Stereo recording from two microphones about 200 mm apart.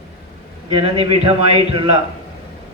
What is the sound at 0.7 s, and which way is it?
A man's voice, 30° right (ahead or behind).